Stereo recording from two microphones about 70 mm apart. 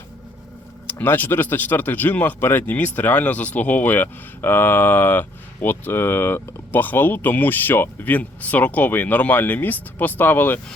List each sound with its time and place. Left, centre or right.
0.9 s speech: left